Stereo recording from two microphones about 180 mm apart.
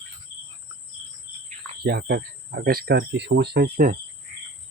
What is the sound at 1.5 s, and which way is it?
Speech, 60° right (ahead or behind).